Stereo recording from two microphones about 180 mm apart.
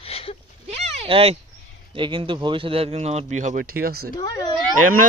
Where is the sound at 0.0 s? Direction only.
30° left (ahead or behind).